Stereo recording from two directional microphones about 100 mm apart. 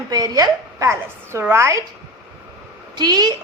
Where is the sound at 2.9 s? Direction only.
40° right (ahead or behind).